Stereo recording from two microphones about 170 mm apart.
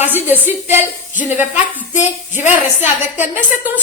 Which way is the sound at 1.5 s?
10° right (ahead or behind).